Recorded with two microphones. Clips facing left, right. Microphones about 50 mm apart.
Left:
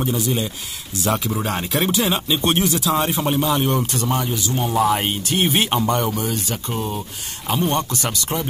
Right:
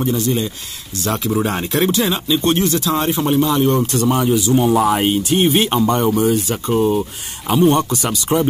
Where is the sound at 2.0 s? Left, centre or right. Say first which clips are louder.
Right 3 dB; centre.